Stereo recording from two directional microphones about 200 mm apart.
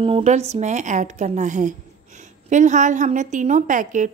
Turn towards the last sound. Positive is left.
turn(degrees=-40)  # may be behind; listen again after turning